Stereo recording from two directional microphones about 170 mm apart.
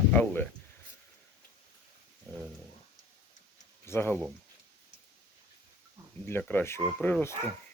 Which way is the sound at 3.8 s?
15° left (ahead or behind).